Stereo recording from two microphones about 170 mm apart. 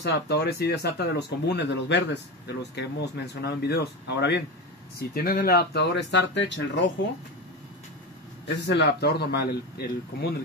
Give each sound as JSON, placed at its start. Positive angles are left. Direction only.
{"t": 0.0, "sound": "speech", "side_deg": 75}
{"t": 3.3, "sound": "speech", "side_deg": 75}
{"t": 4.9, "sound": "speech", "side_deg": 60}
{"t": 8.6, "sound": "speech", "side_deg": 80}